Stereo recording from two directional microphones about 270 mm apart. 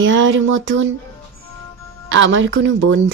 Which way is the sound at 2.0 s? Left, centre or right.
Right.